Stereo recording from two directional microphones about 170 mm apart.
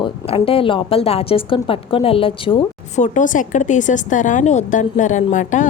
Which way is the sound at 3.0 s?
50° left (ahead or behind).